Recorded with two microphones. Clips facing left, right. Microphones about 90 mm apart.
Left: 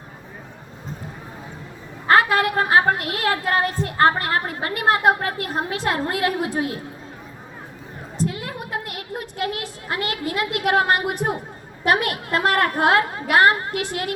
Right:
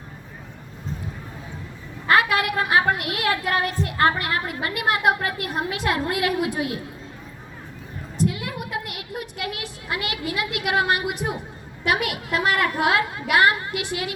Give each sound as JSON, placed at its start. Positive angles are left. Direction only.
{"t": 2.0, "sound": "a woman's voice", "side_deg": 35}
{"t": 8.2, "sound": "a sound", "side_deg": 35}
{"t": 11.9, "sound": "a woman's voice", "side_deg": 45}